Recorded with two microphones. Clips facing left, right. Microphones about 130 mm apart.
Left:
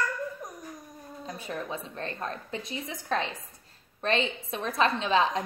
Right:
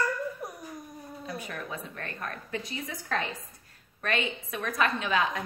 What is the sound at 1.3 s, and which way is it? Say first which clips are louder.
A woman's voice: left 3 dB; 25° left (ahead or behind).